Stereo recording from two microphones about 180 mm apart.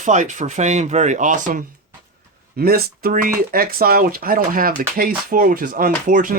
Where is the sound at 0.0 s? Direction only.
45° right (ahead or behind).